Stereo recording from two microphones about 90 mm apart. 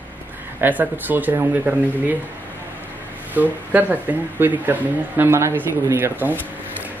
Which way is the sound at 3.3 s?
20° right (ahead or behind).